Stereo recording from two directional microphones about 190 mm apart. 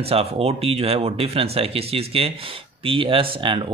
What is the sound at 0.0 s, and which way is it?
Speech, 30° right (ahead or behind).